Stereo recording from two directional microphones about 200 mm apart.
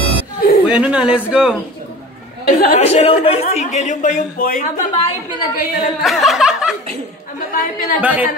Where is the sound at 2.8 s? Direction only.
30° left (ahead or behind).